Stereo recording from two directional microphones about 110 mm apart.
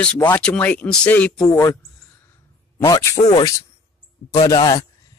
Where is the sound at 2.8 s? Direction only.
30° left (ahead or behind).